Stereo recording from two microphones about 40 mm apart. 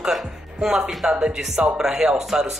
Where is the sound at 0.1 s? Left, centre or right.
Centre.